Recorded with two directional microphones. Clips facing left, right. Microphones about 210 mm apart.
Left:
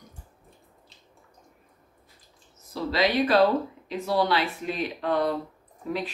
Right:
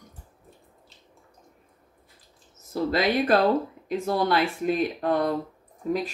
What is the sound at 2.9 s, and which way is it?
Speech, 50° right (ahead or behind).